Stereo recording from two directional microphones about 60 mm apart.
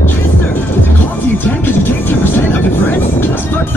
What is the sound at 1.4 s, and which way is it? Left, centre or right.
Vehicle, left.